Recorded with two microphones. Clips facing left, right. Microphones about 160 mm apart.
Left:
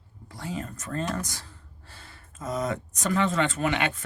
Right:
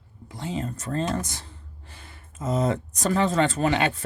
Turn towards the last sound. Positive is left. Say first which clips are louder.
# right 4 dB
turn(degrees=-35)  # may be behind; listen again after turning